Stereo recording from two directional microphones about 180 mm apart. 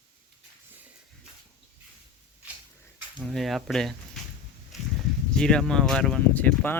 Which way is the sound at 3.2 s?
Centre (ahead or behind).